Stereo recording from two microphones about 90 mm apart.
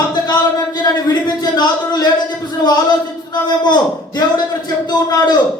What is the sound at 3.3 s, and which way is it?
A man's voice, 55° left (ahead or behind).